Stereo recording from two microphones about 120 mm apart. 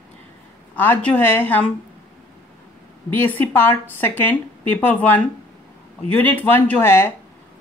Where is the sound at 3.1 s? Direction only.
15° left (ahead or behind).